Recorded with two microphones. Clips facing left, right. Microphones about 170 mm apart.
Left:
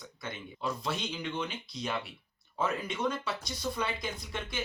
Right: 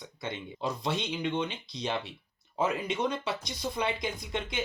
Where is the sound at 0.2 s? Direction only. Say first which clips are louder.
Right 4 dB; 20° right (ahead or behind).